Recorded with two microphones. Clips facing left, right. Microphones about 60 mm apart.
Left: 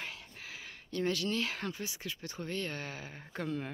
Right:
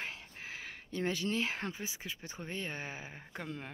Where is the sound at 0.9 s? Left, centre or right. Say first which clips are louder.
Left 2 dB; right; by 3.7 s centre.